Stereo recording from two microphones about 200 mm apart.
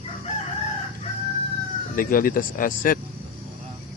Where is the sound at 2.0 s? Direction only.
45° left (ahead or behind).